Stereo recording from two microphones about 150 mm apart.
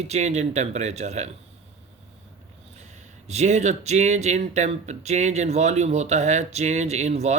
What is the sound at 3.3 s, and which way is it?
A man's voice, 50° right (ahead or behind).